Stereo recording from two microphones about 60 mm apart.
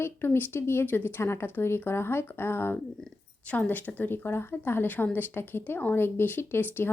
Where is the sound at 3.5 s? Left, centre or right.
Left.